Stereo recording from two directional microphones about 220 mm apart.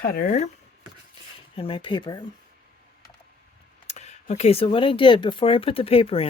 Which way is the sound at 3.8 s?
30° left (ahead or behind).